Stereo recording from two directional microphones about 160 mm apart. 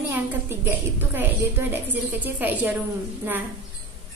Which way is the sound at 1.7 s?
10° right (ahead or behind).